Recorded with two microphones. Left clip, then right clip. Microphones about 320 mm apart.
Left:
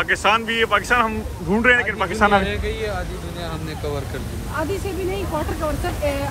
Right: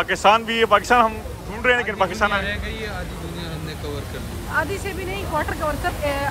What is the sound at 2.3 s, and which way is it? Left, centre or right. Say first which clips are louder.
Speech: left 5 dB; centre.